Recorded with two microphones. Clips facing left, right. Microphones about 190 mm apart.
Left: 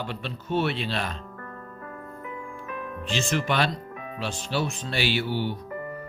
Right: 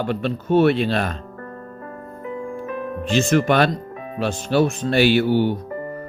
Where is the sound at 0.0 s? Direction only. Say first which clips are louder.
Right 11 dB; 50° right (ahead or behind).